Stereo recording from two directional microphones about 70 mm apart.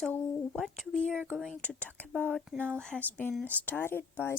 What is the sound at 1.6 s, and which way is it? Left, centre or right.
Speech, left.